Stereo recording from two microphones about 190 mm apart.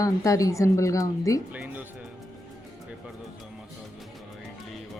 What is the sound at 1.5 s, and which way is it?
Music, 10° right (ahead or behind).